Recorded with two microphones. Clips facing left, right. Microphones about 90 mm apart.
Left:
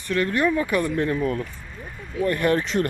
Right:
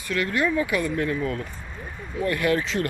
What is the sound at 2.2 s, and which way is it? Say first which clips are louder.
Speech: left 2 dB; 40° left (ahead or behind).